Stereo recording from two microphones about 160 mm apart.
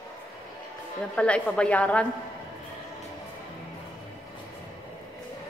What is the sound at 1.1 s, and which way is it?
Speech, 5° left (ahead or behind).